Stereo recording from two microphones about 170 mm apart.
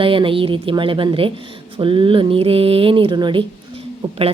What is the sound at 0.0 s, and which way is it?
A woman's voice, 30° right (ahead or behind).